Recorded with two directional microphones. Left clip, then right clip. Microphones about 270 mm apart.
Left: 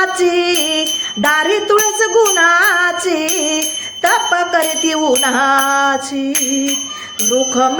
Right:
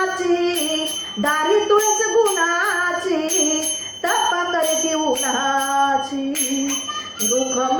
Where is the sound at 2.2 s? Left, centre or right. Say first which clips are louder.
Left 10 dB; left.